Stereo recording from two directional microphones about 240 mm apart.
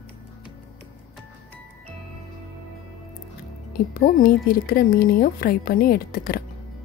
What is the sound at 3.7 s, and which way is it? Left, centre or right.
Speech, left.